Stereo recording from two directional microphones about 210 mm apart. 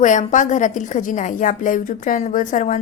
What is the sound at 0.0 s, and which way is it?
A woman's voice, 35° left (ahead or behind).